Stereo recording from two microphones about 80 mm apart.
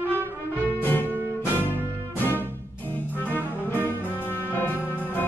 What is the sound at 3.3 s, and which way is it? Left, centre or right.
Music, left.